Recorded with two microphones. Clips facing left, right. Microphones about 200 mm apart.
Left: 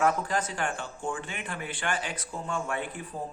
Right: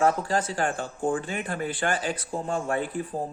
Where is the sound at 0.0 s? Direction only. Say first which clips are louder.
Right 3 dB; 30° right (ahead or behind).